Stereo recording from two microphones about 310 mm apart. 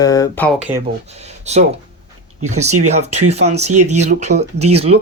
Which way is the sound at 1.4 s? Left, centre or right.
Right.